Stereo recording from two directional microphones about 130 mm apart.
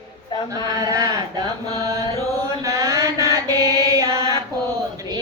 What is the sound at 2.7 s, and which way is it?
Mantra, 25° right (ahead or behind).